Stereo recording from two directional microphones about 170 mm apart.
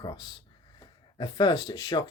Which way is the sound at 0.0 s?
25° left (ahead or behind).